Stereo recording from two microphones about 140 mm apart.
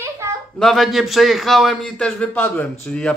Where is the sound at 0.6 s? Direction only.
Centre (ahead or behind).